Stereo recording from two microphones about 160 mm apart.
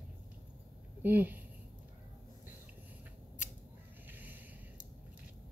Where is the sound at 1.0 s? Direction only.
10° right (ahead or behind).